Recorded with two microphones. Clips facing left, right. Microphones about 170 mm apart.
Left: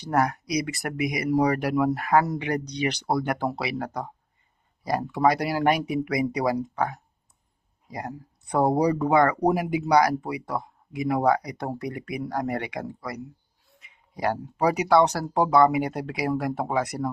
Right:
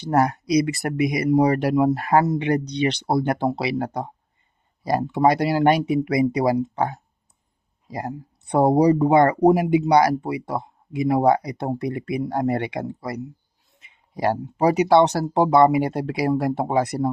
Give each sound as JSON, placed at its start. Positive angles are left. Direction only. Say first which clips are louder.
{"t": 0.0, "sound": "speech", "louder": "right 4 dB", "side_deg": -30}